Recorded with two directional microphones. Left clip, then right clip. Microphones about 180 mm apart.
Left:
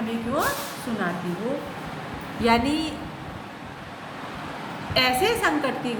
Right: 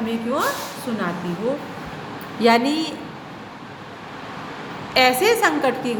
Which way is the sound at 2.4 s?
30° right (ahead or behind).